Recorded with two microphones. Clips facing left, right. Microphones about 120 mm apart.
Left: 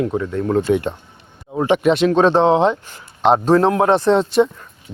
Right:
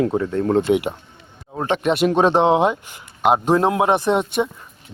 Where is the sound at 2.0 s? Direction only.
15° right (ahead or behind).